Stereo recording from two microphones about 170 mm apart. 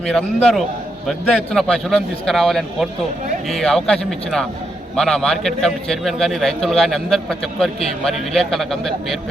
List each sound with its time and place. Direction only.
0.0 s a man's voice: centre (ahead or behind)